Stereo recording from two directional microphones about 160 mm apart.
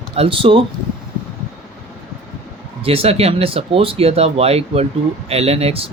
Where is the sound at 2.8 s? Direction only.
35° right (ahead or behind).